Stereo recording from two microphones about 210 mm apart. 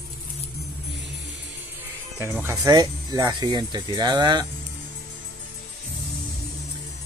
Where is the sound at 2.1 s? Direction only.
10° right (ahead or behind).